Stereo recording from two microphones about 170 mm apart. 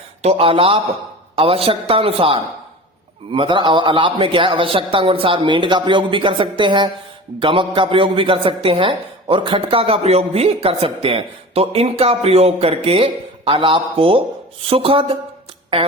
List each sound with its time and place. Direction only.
0.2 s a man's voice: 35° right (ahead or behind)